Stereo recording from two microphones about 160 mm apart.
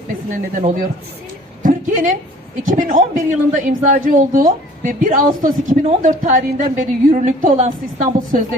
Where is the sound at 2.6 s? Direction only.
55° right (ahead or behind).